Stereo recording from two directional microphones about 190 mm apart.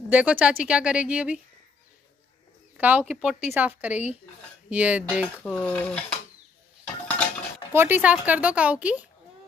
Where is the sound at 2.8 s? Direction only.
10° right (ahead or behind).